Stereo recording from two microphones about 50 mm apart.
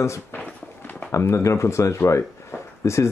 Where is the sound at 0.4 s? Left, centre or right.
Left.